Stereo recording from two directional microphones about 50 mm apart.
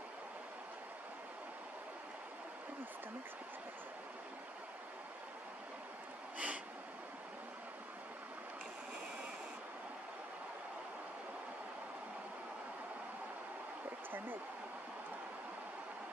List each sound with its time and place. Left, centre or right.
6.3 s snort: right